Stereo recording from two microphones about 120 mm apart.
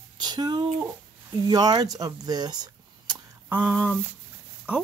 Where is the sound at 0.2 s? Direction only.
35° right (ahead or behind).